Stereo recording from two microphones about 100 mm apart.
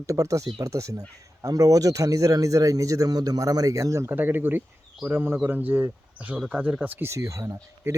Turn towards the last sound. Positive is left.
turn(degrees=-25)  # may be behind; listen again after turning